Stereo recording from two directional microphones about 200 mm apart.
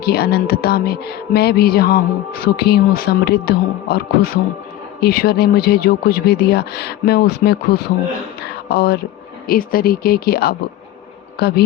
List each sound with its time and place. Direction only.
0.0 s speech: 50° left (ahead or behind)
8.4 s a sound: 50° left (ahead or behind)
9.5 s a man's voice: 45° left (ahead or behind)